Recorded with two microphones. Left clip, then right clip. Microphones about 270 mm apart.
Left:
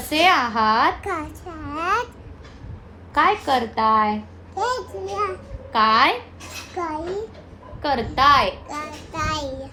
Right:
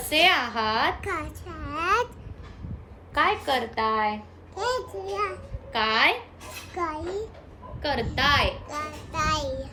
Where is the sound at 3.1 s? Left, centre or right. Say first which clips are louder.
Left 5 dB; centre.